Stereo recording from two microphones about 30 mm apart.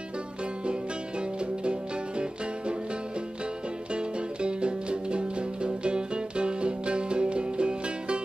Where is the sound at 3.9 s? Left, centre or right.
Right.